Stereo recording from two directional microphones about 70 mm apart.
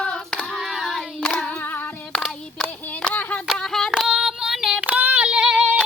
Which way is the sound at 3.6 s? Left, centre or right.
Centre.